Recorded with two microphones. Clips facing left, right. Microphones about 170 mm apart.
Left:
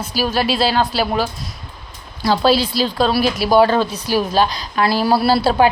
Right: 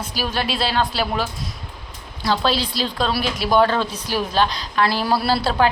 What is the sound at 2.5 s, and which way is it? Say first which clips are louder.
A woman's voice: left 6 dB; 5° left (ahead or behind).